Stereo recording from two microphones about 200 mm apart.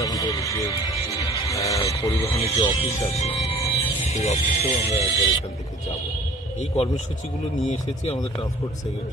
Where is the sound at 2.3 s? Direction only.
30° left (ahead or behind).